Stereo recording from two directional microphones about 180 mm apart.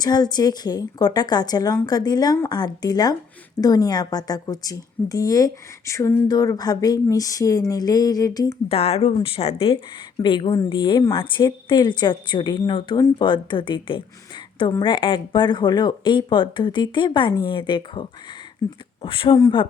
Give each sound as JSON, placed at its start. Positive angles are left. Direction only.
{"t": 0.0, "sound": "a woman's voice", "side_deg": 20}
{"t": 8.7, "sound": "a woman's voice", "side_deg": 35}
{"t": 19.0, "sound": "a woman's voice", "side_deg": 30}